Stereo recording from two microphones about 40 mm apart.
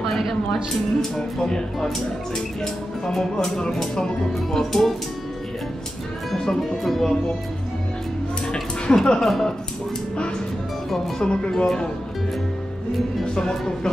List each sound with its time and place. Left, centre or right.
1.4 s speech: centre
6.3 s speech: centre
8.8 s a woman's voice: centre
9.2 s a woman's voice: centre
11.1 s speech: left
11.5 s speech: centre
13.2 s speech: centre